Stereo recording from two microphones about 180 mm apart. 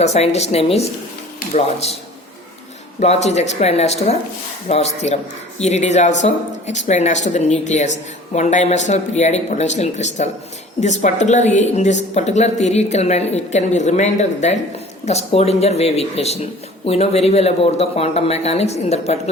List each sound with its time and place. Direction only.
0.0 s speech: 35° left (ahead or behind)
3.0 s speech: 35° left (ahead or behind)